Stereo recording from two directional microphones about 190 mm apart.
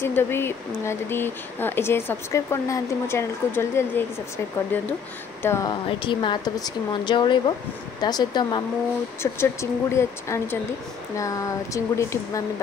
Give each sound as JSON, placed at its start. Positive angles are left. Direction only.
{"t": 0.0, "sound": "speech", "side_deg": 10}
{"t": 5.4, "sound": "a woman's voice", "side_deg": 15}